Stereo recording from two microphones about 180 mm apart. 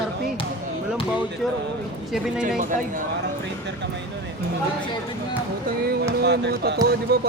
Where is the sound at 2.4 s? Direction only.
45° right (ahead or behind).